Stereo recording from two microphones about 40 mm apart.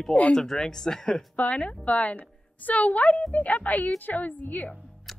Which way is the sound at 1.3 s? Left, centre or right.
Left.